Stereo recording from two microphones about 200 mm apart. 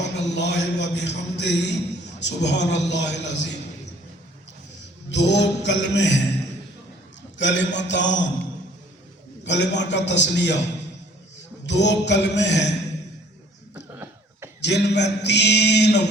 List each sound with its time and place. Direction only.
0.2 s a man's voice: 60° left (ahead or behind)
5.1 s a man's voice: 60° left (ahead or behind)
7.3 s a man's voice: 65° left (ahead or behind)
9.4 s a man's voice: 60° left (ahead or behind)
13.7 s cough: 10° right (ahead or behind)
14.6 s a man's voice: 60° left (ahead or behind)